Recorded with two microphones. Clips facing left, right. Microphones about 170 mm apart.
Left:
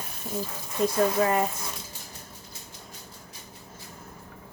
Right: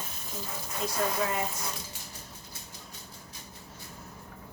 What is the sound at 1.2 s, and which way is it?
Speech, 45° left (ahead or behind).